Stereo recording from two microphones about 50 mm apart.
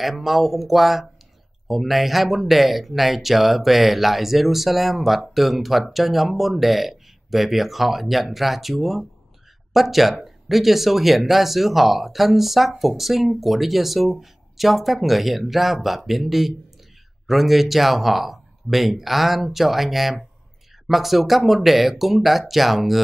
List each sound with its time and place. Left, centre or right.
0.0 s speech: centre